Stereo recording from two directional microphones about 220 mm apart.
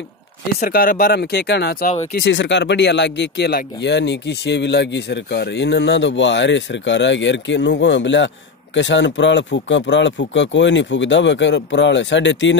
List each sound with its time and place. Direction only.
0.6 s speech: 40° left (ahead or behind)
2.2 s speech: 55° left (ahead or behind)